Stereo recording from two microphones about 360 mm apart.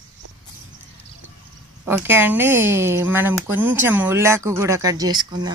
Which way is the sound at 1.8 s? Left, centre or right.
Centre.